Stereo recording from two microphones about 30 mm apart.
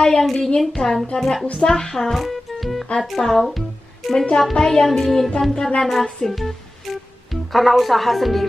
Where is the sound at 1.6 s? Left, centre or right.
Left.